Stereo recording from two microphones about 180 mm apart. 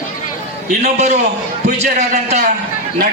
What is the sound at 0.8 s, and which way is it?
A man's voice, 40° right (ahead or behind).